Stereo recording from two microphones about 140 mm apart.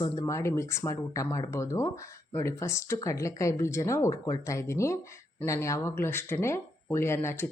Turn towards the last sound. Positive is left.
turn(degrees=20)  # may be behind; listen again after turning